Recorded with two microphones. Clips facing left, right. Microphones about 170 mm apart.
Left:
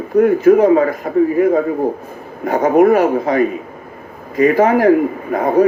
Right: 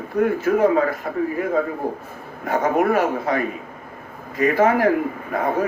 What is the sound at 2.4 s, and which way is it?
A man's voice, 15° left (ahead or behind).